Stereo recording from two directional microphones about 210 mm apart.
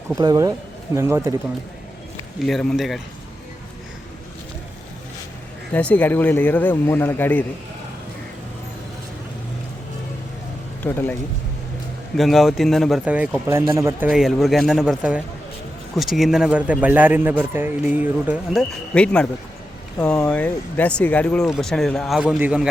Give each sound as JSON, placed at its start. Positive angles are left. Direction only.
{"t": 0.2, "sound": "speech", "side_deg": -15}
{"t": 2.5, "sound": "speech", "side_deg": 0}
{"t": 5.7, "sound": "speech", "side_deg": 10}
{"t": 10.8, "sound": "speech", "side_deg": 10}
{"t": 14.1, "sound": "speech", "side_deg": 0}
{"t": 18.9, "sound": "speech", "side_deg": 5}